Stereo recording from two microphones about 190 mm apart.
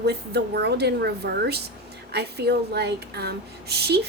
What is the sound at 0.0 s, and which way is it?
A woman's voice, 60° right (ahead or behind).